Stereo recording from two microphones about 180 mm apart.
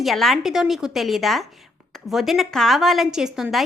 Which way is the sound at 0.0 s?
Centre (ahead or behind).